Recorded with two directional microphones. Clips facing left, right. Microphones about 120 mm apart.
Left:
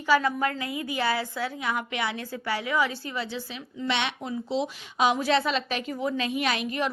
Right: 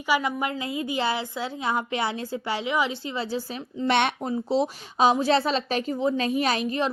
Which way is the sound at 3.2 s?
40° right (ahead or behind).